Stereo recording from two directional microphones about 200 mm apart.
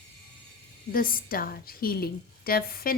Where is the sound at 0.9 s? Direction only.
45° left (ahead or behind).